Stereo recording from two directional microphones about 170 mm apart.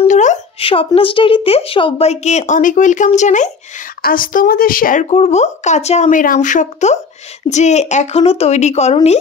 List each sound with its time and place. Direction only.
0.1 s speech: 45° left (ahead or behind)